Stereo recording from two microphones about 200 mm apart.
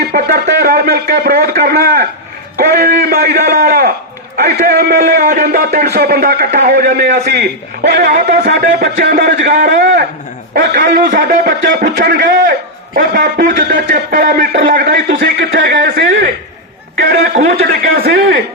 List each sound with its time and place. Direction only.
0.1 s a man's voice: 50° right (ahead or behind)
8.4 s a man's voice: 55° right (ahead or behind)